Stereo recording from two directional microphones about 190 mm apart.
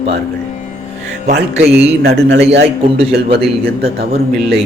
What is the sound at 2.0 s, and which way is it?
A man's voice, 65° right (ahead or behind).